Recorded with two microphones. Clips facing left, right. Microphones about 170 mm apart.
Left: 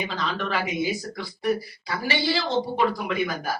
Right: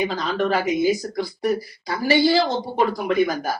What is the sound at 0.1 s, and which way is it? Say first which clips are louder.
Speech: right 6 dB; 40° right (ahead or behind).